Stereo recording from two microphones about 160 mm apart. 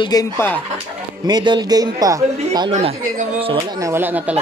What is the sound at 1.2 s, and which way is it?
A man's voice, 25° right (ahead or behind).